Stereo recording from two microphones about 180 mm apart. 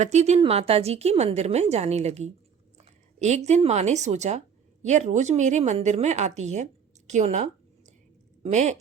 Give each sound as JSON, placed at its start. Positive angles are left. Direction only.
{"t": 0.0, "sound": "speech", "side_deg": -40}
{"t": 8.4, "sound": "speech", "side_deg": -40}